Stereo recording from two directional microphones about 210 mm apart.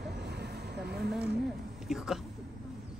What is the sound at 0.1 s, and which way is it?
Vehicle, 50° right (ahead or behind).